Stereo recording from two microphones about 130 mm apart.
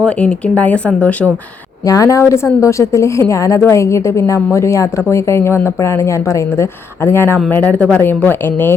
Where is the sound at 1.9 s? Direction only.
25° left (ahead or behind).